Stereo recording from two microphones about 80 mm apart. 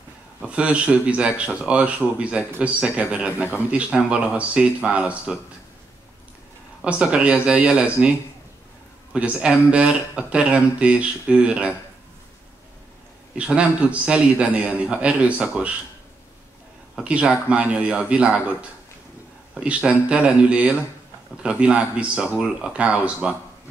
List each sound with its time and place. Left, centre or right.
0.4 s speech: centre
6.8 s speech: centre
9.1 s speech: centre
13.3 s speech: centre
16.9 s speech: centre
19.5 s speech: centre